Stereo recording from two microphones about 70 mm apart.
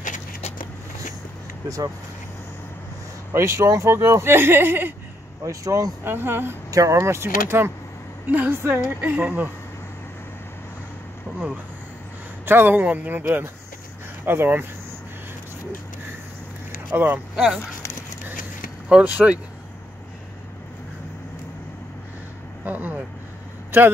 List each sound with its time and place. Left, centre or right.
3.3 s speech: right
5.4 s speech: right
6.0 s speech: right
6.7 s speech: right
7.0 s speech: right
12.4 s speech: right
16.9 s speech: right
18.9 s speech: centre
22.7 s vehicle: right
23.7 s speech: right